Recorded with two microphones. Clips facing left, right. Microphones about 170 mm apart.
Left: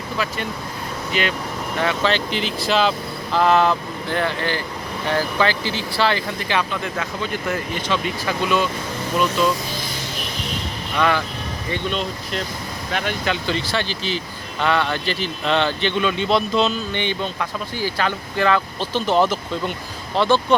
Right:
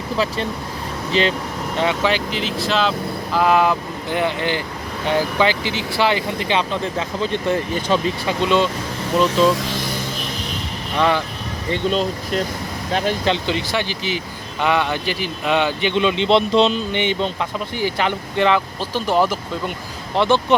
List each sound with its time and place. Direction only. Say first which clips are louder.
1.1 s speech: right 5 dB; 30° right (ahead or behind)
1.8 s speech: right 2 dB; 20° right (ahead or behind)
2.1 s a man's voice: right 1 dB; centre (ahead or behind); by 8.7 s 25° right (ahead or behind)
9.6 s a sound: right 4 dB; 80° right
10.9 s speech: right 2 dB; 25° right (ahead or behind)
11.7 s a man's voice: right 5 dB; 40° right (ahead or behind); by 18.6 s 20° right (ahead or behind)
18.8 s a man's voice: even; 5° right (ahead or behind)